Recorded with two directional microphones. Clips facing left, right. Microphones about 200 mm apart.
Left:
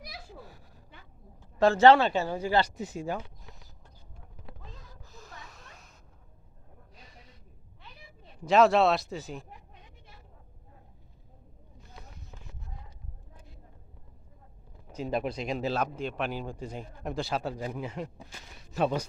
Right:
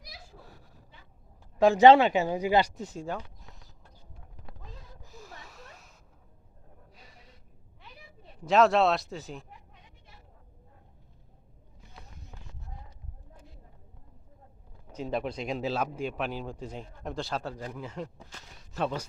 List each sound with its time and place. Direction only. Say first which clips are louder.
1.5 s speech: right 2 dB; 15° right (ahead or behind)
2.7 s speech: left 2 dB; 5° left (ahead or behind)
5.0 s snort: right 1 dB; 10° right (ahead or behind)
6.9 s snort: left 3 dB; 5° right (ahead or behind)
8.4 s speech: left 1 dB; centre (ahead or behind)
14.9 s speech: left 1 dB; 10° left (ahead or behind)